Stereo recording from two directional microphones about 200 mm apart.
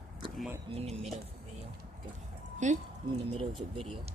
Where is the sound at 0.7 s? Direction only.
30° right (ahead or behind).